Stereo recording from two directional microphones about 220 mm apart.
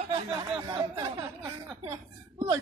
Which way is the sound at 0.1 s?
20° right (ahead or behind).